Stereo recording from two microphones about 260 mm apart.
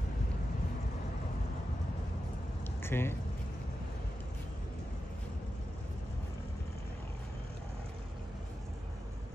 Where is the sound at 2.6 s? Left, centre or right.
Centre.